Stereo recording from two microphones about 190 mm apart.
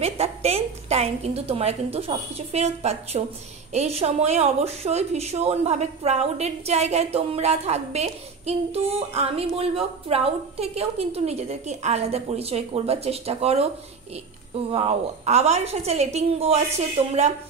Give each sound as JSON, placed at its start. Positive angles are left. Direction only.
{"t": 0.0, "sound": "a woman's voice", "side_deg": -30}